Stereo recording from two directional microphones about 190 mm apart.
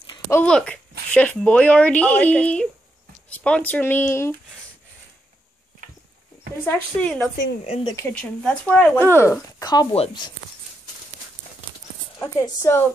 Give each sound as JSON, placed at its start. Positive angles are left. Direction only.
{"t": 0.3, "sound": "speech", "side_deg": 5}
{"t": 6.6, "sound": "speech", "side_deg": 10}
{"t": 7.6, "sound": "speech", "side_deg": 35}
{"t": 7.9, "sound": "speech", "side_deg": 10}
{"t": 12.2, "sound": "speech", "side_deg": 15}